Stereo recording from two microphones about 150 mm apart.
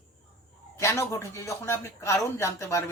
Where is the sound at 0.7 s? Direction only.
20° left (ahead or behind).